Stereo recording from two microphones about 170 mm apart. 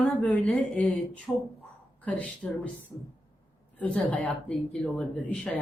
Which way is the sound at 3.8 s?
10° left (ahead or behind).